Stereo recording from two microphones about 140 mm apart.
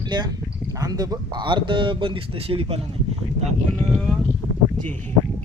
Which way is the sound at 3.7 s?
Centre (ahead or behind).